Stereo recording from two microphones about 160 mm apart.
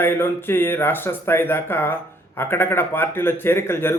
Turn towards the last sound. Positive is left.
turn(degrees=15)  # may be behind; listen again after turning